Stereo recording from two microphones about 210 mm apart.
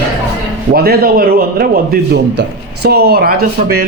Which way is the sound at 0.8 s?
45° right (ahead or behind).